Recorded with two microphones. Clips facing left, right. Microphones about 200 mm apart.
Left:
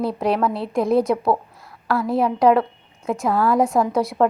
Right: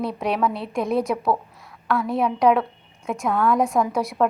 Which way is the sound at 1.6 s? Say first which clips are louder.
Left 1 dB; 5° left (ahead or behind).